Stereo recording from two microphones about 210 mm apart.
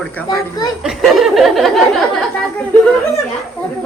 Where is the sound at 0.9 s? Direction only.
Centre (ahead or behind).